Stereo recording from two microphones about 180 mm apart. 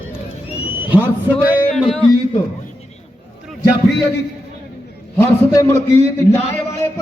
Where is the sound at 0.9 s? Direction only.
10° right (ahead or behind).